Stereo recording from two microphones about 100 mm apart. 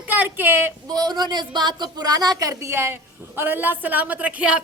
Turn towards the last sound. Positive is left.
turn(degrees=-10)  # may be behind; listen again after turning